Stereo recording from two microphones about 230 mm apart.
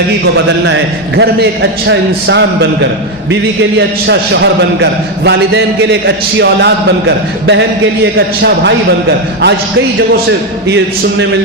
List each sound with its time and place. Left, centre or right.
0.6 s a man's voice: right
3.8 s a man's voice: right
8.4 s a man's voice: right